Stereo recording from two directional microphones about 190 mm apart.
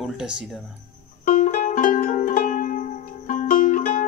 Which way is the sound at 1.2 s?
40° left (ahead or behind).